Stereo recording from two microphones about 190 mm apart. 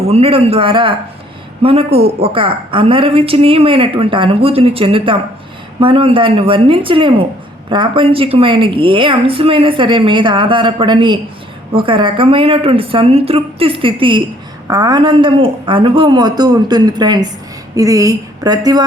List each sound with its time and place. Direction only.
0.1 s a man's voice: 30° right (ahead or behind)